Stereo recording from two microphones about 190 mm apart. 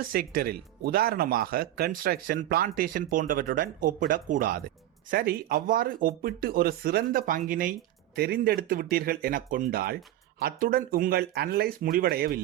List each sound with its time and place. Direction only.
0.0 s speech: 50° right (ahead or behind)